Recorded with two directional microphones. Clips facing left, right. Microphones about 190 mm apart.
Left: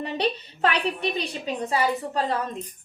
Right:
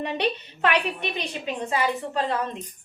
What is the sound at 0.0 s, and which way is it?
A woman's voice, 35° left (ahead or behind).